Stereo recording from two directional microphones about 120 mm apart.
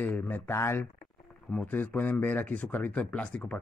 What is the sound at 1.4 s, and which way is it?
Speech, 10° left (ahead or behind).